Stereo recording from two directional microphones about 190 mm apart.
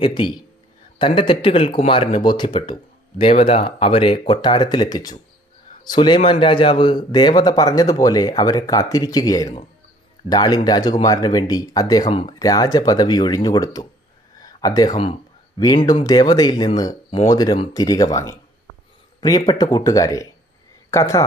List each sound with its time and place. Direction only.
0.0 s speech: 25° left (ahead or behind)